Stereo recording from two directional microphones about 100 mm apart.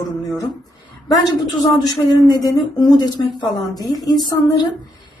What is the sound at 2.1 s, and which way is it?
A woman's voice, 40° left (ahead or behind).